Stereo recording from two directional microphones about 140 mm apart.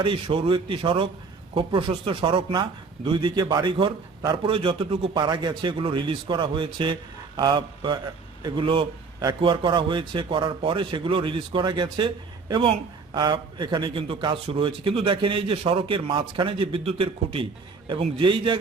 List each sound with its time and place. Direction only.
0.0 s a man's voice: 40° right (ahead or behind)